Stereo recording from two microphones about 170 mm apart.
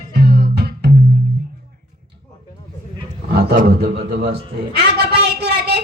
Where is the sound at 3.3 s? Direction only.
60° right (ahead or behind).